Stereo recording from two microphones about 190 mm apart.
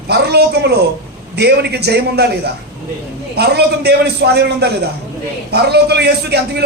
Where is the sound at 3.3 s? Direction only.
60° right (ahead or behind).